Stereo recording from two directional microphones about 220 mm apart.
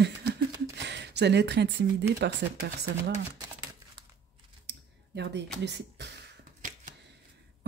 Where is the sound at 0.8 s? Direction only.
50° right (ahead or behind).